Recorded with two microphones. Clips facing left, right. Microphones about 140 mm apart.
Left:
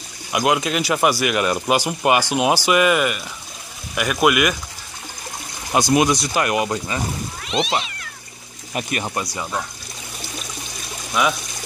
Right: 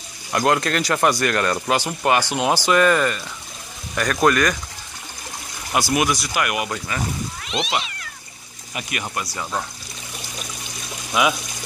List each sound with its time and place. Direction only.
0.3 s speech: 10° left (ahead or behind)
5.7 s speech: 20° left (ahead or behind)
7.4 s cat: centre (ahead or behind)
9.0 s speech: 20° left (ahead or behind)
11.2 s speech: 5° right (ahead or behind)